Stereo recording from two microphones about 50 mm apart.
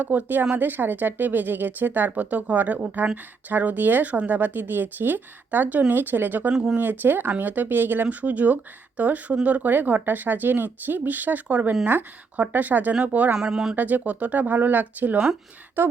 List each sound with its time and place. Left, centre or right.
0.0 s speech: right
8.0 s speech: right
13.3 s speech: centre
13.7 s speech: right